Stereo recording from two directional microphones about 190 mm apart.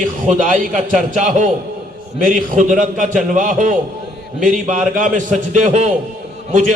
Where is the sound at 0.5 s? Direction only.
45° right (ahead or behind).